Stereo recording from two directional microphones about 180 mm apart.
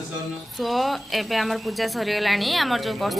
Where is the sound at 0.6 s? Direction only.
Centre (ahead or behind).